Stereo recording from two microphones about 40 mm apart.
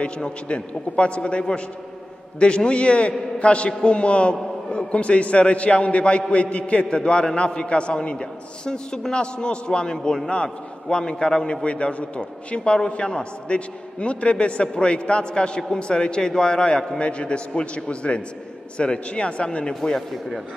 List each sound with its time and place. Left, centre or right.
0.0 s a man's voice: left
11.6 s a man's voice: left
19.7 s a man's voice: centre
20.1 s a man's voice: centre